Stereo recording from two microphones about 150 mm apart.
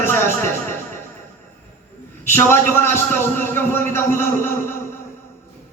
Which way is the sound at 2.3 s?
15° left (ahead or behind).